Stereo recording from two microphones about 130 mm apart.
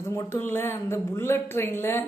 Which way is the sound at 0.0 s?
20° left (ahead or behind).